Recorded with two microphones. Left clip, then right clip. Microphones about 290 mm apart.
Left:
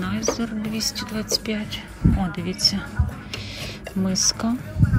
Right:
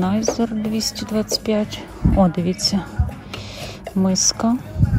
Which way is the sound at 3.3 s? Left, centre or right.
Centre.